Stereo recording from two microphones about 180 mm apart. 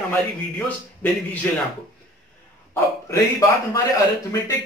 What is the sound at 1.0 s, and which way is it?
Speech, 10° left (ahead or behind).